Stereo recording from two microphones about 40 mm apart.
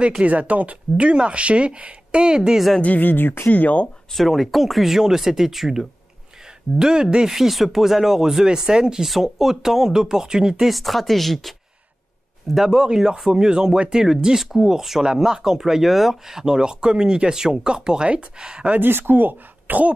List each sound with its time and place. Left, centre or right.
0.2 s speech: right; by 2.6 s centre
2.8 s speech: left
3.4 s speech: left
4.1 s speech: centre
6.8 s speech: centre
7.2 s speech: centre
9.0 s speech: centre
10.7 s speech: centre
12.6 s speech: centre
18.7 s speech: right